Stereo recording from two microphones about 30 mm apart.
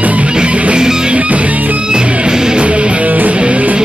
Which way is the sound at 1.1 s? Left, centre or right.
Right.